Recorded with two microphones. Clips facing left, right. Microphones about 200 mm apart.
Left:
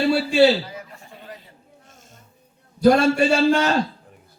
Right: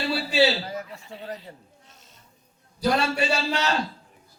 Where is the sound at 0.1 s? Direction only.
50° left (ahead or behind).